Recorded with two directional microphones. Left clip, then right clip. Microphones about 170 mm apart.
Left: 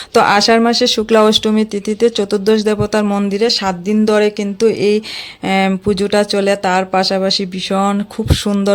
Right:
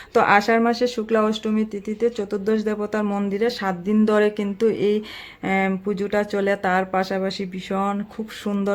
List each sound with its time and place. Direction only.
0.1 s speech: 25° left (ahead or behind)